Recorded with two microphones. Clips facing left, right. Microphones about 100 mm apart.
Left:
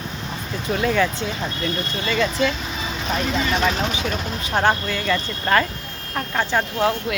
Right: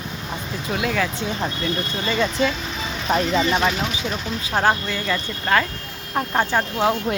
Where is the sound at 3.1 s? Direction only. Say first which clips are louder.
Right 4 dB; 40° right (ahead or behind).